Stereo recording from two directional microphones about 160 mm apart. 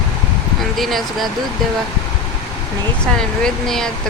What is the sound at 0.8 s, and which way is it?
Speech, centre (ahead or behind).